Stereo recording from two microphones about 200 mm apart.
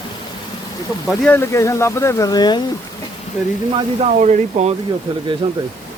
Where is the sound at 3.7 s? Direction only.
30° right (ahead or behind).